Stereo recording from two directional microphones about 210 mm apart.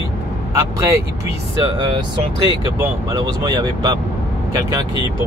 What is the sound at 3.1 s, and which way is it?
Speech, 20° right (ahead or behind).